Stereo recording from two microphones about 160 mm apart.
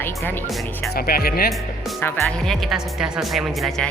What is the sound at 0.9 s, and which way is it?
Speech, 70° left (ahead or behind).